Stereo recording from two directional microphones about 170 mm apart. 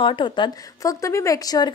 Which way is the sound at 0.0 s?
30° left (ahead or behind).